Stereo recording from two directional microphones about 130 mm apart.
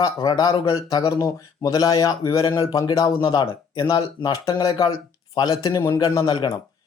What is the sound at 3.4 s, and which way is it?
Speech, 45° left (ahead or behind).